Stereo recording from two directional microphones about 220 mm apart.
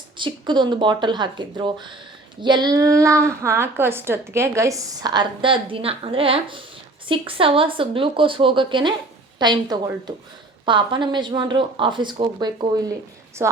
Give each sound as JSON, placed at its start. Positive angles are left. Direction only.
{"t": 0.2, "sound": "a woman's voice", "side_deg": -20}